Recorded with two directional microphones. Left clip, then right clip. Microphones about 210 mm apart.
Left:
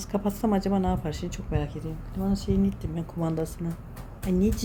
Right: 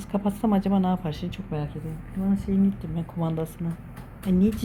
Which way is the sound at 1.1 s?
30° left (ahead or behind).